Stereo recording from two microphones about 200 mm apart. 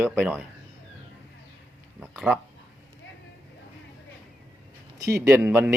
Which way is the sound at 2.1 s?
Centre (ahead or behind).